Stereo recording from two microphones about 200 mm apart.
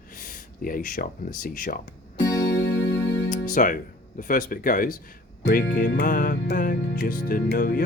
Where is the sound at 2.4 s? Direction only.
65° left (ahead or behind).